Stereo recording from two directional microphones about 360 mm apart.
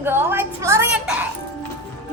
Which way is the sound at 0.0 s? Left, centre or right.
Centre.